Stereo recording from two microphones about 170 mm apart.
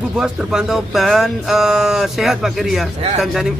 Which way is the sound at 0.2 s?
5° right (ahead or behind).